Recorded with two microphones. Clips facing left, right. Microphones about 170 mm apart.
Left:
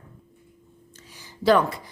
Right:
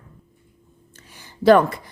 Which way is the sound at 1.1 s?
55° right (ahead or behind).